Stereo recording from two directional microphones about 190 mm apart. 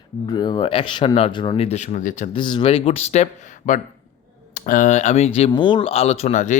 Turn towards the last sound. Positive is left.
turn(degrees=40)  # may be behind; listen again after turning